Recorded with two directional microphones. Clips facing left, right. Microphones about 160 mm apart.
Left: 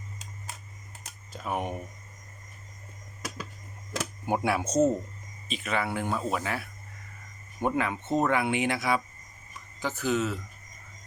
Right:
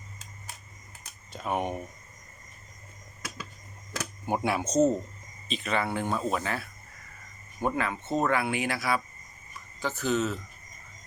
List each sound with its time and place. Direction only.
1.3 s speech: centre (ahead or behind)
4.3 s speech: 5° left (ahead or behind)